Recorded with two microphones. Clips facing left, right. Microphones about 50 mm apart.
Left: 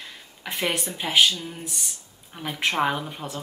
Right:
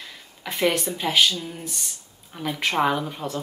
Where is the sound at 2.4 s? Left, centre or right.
Centre.